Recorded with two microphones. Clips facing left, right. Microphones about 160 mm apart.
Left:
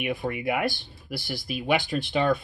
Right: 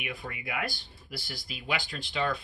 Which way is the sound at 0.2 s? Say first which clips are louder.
Left 7 dB; 60° left (ahead or behind).